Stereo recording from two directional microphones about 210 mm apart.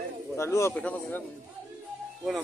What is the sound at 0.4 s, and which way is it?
Speech, 15° left (ahead or behind).